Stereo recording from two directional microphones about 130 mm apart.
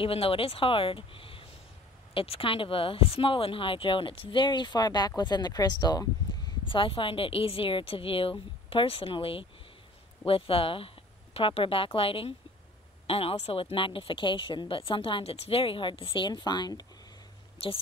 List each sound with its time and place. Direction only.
0.0 s speech: 45° left (ahead or behind)